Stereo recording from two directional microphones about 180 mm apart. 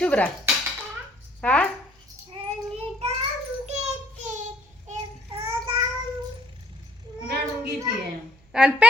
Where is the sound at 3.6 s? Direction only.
40° right (ahead or behind).